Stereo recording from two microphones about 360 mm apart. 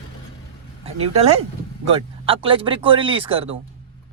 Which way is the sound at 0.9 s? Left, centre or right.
Centre.